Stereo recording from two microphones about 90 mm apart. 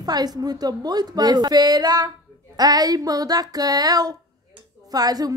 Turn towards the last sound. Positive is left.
turn(degrees=-45)  # may be behind; listen again after turning